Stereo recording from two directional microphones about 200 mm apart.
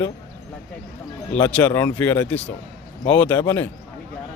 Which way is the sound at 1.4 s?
5° left (ahead or behind).